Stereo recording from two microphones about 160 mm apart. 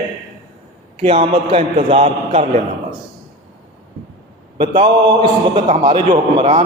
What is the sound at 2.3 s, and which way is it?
Speech, 50° right (ahead or behind).